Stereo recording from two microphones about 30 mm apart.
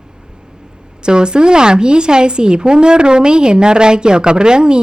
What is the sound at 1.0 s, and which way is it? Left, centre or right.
A woman's voice, right.